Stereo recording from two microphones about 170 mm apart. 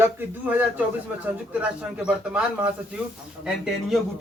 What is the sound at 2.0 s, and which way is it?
A man's voice, 5° right (ahead or behind).